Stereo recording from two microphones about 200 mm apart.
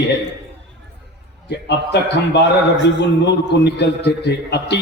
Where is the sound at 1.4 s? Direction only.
60° left (ahead or behind).